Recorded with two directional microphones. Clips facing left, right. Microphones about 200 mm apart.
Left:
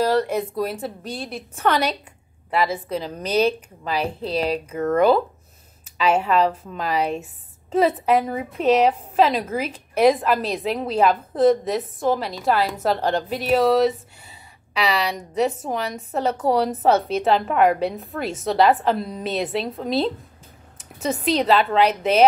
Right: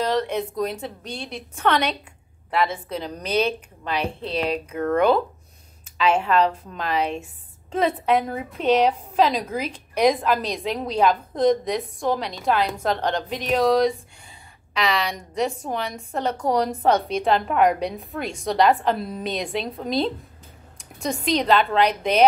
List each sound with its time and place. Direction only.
0.0 s a woman's voice: 10° left (ahead or behind)